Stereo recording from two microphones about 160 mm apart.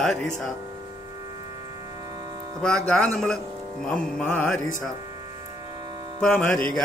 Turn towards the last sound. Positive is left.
turn(degrees=5)  # may be behind; listen again after turning